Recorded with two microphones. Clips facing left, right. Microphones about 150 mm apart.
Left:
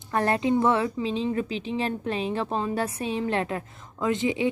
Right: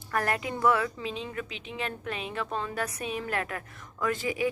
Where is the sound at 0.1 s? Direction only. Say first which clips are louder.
Left 7 dB; 25° left (ahead or behind).